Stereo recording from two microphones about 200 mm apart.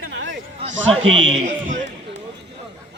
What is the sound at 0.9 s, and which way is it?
Speech, 75° right (ahead or behind).